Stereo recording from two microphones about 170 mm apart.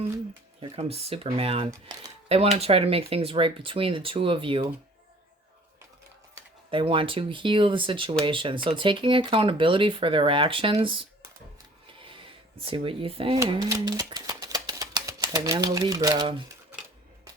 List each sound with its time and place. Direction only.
0.6 s speech: 35° right (ahead or behind)
6.7 s speech: 30° right (ahead or behind)
12.0 s speech: 30° right (ahead or behind)
13.7 s typewriter: 20° right (ahead or behind)